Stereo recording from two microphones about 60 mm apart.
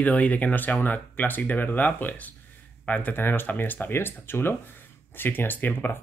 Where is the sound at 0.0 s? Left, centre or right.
Left.